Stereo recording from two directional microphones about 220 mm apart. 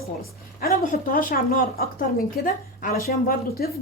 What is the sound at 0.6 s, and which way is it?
A woman's voice, 40° left (ahead or behind).